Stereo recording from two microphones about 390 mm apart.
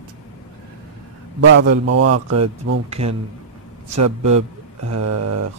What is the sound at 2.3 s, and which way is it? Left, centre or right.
Speech, right.